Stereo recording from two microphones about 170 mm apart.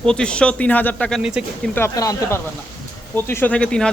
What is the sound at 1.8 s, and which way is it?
Speech, 15° left (ahead or behind).